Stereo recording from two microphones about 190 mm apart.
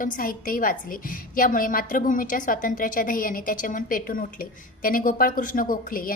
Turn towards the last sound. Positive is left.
turn(degrees=45)  # may be behind; listen again after turning